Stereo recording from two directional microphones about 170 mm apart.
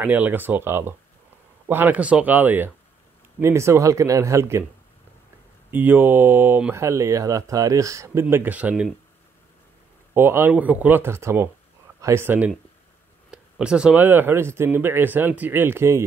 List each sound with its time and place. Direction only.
0.0 s speech: 10° right (ahead or behind)
5.7 s speech: 10° right (ahead or behind)
10.1 s speech: 10° right (ahead or behind)